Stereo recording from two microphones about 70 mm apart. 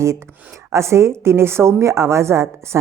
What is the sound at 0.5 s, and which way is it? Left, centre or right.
A woman's voice, right.